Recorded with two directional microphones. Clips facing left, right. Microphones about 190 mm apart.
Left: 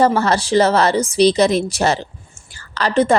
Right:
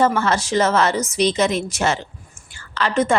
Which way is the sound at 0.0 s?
35° left (ahead or behind).